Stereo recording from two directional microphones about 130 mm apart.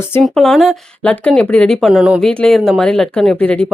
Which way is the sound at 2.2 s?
5° left (ahead or behind).